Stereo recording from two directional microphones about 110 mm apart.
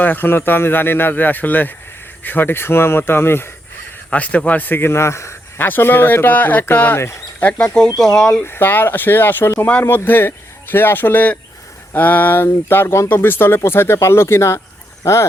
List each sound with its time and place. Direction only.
0.0 s a man's voice: 15° left (ahead or behind)
8.4 s speech: 20° left (ahead or behind)